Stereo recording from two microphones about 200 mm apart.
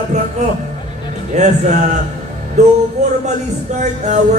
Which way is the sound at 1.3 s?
35° right (ahead or behind).